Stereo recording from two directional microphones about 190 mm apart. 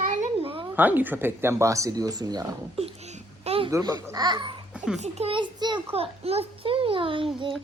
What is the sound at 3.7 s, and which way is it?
Speech, 15° right (ahead or behind).